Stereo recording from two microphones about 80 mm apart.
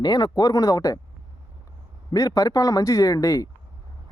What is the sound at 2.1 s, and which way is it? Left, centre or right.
Speech, left.